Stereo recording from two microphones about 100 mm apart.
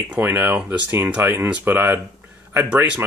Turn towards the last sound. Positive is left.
turn(degrees=-20)  # may be behind; listen again after turning